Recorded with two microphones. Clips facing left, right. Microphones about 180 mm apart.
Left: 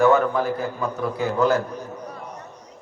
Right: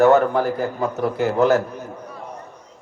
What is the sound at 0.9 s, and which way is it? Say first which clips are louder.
Speech: right 4 dB; 75° right (ahead or behind).